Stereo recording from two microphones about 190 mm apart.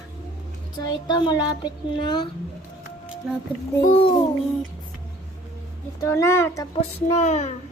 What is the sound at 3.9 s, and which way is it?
Speech, 30° left (ahead or behind).